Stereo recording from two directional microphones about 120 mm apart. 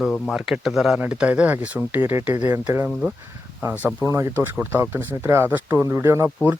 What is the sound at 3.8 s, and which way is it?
Speech, 20° right (ahead or behind).